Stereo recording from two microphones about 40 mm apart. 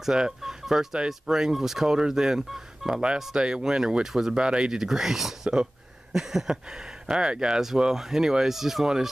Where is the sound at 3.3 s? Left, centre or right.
Right.